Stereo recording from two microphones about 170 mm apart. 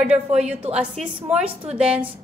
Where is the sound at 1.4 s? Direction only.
35° right (ahead or behind).